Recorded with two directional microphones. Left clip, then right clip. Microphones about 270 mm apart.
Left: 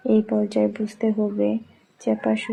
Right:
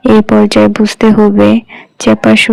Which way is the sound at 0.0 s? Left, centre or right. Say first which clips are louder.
Right 14 dB; right.